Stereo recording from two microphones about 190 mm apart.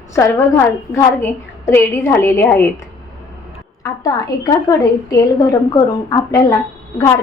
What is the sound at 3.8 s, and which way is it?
Speech, 20° left (ahead or behind).